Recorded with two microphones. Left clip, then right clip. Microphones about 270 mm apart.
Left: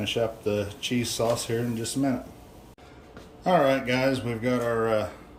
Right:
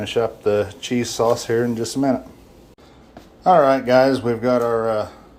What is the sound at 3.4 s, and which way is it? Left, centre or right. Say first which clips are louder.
Speech: right 8 dB; centre.